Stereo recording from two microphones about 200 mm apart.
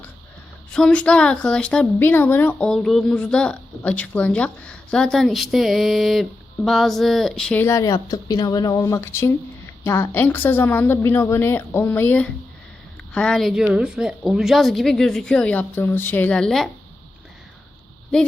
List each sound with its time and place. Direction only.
0.7 s a woman's voice: 5° left (ahead or behind)